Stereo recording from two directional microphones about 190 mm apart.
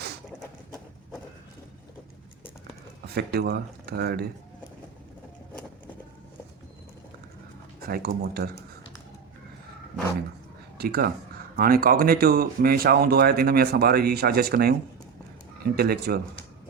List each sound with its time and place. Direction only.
3.1 s speech: 55° right (ahead or behind)
7.9 s speech: 55° right (ahead or behind)
10.8 s speech: 55° right (ahead or behind)